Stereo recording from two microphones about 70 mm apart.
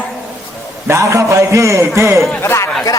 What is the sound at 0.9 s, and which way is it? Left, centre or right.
A man's voice, right.